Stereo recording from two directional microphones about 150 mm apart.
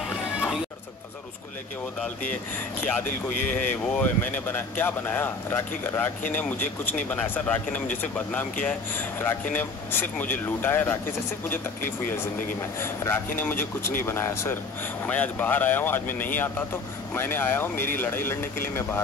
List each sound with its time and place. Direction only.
2.8 s speech: 10° left (ahead or behind)